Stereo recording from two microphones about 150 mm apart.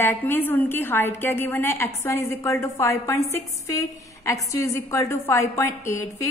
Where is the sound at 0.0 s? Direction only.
15° left (ahead or behind).